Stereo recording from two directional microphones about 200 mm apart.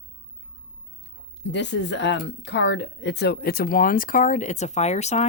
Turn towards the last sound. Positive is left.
turn(degrees=35)  # may be behind; listen again after turning